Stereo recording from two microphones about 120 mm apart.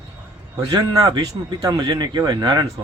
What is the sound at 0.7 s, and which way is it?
Speech, 30° right (ahead or behind).